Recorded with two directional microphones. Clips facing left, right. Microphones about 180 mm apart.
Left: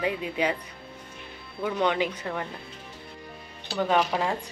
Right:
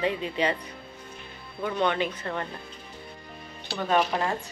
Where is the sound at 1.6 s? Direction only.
15° left (ahead or behind).